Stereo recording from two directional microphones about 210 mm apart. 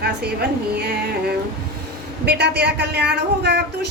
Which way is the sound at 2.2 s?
50° right (ahead or behind).